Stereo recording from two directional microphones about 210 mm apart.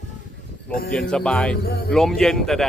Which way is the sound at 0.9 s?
5° left (ahead or behind).